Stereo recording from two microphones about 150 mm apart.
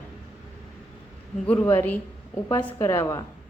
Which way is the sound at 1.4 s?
10° left (ahead or behind).